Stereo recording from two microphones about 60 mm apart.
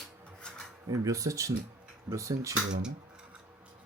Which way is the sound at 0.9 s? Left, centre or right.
Right.